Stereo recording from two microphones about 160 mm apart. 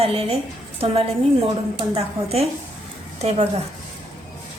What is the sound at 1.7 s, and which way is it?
Speech, 40° right (ahead or behind).